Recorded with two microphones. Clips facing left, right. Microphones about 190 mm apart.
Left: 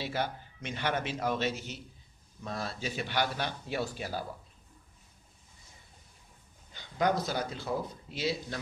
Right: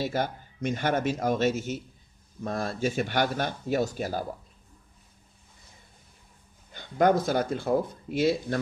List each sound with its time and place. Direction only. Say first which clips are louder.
0.0 s speech: right 5 dB; 45° right (ahead or behind)
6.7 s speech: right 7 dB; 50° right (ahead or behind)